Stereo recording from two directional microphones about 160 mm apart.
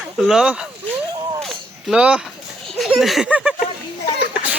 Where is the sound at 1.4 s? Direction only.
Centre (ahead or behind).